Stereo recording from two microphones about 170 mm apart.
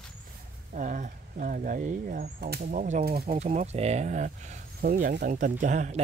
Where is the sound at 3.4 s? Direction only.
40° right (ahead or behind).